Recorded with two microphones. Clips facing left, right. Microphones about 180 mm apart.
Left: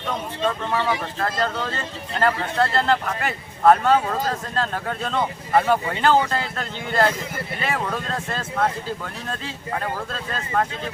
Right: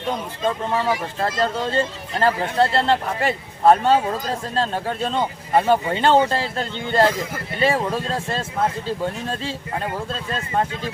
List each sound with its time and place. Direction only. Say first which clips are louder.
1.2 s a man's voice: right 3 dB; 30° right (ahead or behind)